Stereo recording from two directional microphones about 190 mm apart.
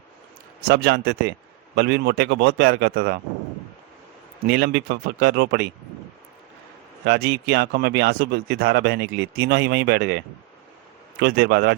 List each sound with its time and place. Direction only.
0.7 s speech: 60° right (ahead or behind)
4.4 s speech: 60° right (ahead or behind)
7.0 s speech: 60° right (ahead or behind)